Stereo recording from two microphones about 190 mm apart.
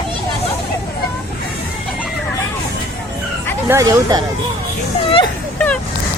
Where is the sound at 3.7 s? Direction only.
15° right (ahead or behind).